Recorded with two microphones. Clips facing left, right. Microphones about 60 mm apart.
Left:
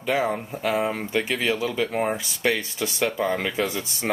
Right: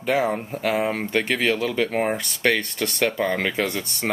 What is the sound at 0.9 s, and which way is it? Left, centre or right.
Speech, right.